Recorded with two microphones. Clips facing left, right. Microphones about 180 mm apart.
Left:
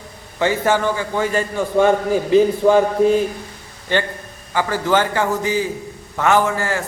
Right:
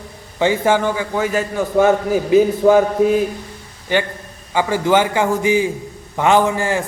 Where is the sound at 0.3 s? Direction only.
15° right (ahead or behind).